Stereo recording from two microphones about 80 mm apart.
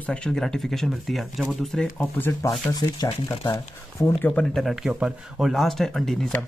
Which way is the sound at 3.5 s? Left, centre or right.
Left.